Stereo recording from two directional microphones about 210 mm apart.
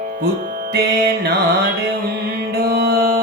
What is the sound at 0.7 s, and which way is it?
Music, 50° right (ahead or behind).